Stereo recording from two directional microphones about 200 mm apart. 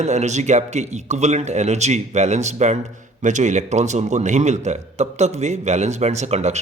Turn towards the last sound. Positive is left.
turn(degrees=-35)  # may be behind; listen again after turning